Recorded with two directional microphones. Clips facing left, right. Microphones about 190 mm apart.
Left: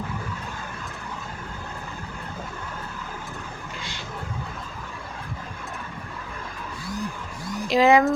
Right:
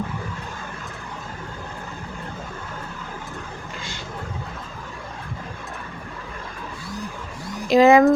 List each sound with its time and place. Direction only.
7.7 s speech: 45° right (ahead or behind)